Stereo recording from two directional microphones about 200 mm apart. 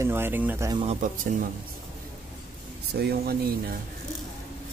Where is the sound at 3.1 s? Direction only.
50° right (ahead or behind).